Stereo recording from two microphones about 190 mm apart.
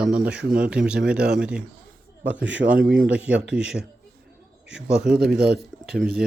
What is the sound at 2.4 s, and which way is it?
Speech, 75° right (ahead or behind).